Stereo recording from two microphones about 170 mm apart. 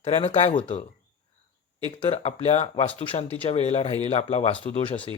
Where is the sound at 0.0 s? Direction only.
35° left (ahead or behind).